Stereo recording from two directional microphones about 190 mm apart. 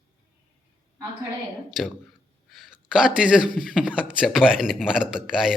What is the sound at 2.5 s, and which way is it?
A man's voice, centre (ahead or behind).